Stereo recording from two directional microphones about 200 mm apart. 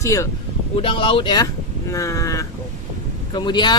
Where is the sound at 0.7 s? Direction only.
25° left (ahead or behind).